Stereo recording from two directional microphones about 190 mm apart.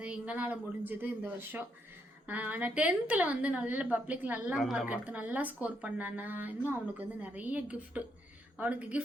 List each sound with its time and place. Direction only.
0.0 s a woman's voice: 5° right (ahead or behind)